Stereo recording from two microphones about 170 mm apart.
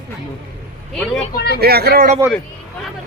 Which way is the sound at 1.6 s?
65° right (ahead or behind).